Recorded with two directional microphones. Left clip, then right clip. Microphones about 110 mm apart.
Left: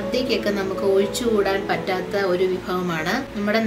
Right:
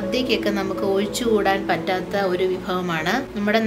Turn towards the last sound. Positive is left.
turn(degrees=-25)  # may be behind; listen again after turning